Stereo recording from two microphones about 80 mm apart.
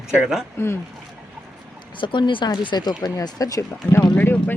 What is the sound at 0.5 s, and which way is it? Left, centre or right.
Speech, left.